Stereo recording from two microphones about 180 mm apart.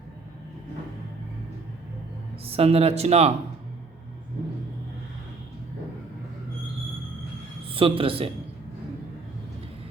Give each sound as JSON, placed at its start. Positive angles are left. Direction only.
{"t": 2.5, "sound": "speech", "side_deg": -35}
{"t": 7.7, "sound": "a man's voice", "side_deg": -30}